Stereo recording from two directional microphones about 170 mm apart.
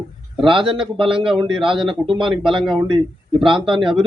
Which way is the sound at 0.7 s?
30° right (ahead or behind).